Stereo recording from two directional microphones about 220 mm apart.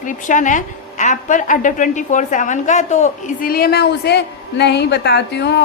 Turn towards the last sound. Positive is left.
turn(degrees=50)  # may be behind; listen again after turning